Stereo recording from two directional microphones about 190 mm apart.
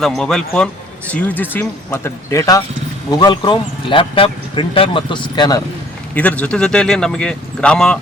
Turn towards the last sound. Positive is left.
turn(degrees=5)  # may be behind; listen again after turning